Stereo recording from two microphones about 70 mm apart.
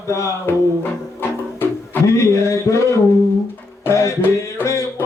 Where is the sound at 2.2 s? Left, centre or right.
Left.